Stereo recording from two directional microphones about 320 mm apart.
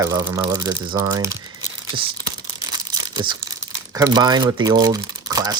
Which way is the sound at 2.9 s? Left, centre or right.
Centre.